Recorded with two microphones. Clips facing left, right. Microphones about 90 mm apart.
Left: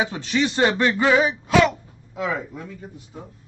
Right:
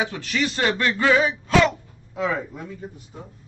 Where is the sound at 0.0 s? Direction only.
20° left (ahead or behind); by 2.7 s centre (ahead or behind).